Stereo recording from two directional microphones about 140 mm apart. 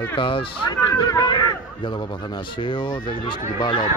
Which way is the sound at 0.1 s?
40° left (ahead or behind).